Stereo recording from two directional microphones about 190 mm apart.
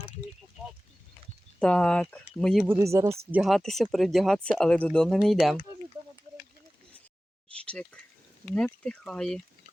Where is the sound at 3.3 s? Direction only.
Centre (ahead or behind).